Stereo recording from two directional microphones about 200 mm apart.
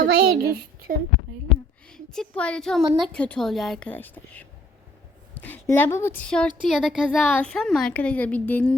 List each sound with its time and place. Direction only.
0.0 s a woman's voice: 50° right (ahead or behind)
1.9 s a woman's voice: 5° left (ahead or behind)